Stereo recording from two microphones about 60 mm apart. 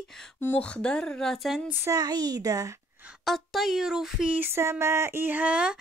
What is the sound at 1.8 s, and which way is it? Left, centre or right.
Speech, right.